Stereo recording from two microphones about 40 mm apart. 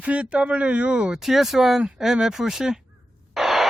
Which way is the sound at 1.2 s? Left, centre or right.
Centre.